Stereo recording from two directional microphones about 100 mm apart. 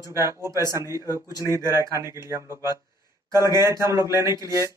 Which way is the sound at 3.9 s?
30° right (ahead or behind).